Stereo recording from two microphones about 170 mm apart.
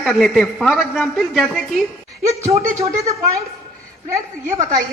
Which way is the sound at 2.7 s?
15° right (ahead or behind).